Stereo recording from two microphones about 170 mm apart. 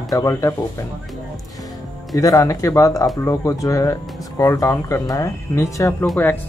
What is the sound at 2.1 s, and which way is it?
Speech, 20° left (ahead or behind).